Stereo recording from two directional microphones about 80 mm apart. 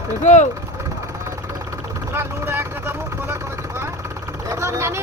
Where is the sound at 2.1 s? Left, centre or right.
Right.